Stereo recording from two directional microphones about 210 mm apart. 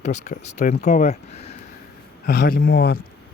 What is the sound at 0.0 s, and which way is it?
Speech, 35° left (ahead or behind).